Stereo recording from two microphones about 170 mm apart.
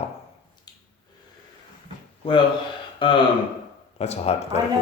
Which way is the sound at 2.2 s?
30° left (ahead or behind).